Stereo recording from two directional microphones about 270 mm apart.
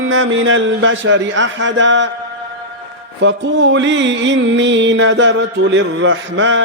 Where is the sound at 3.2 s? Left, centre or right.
Right.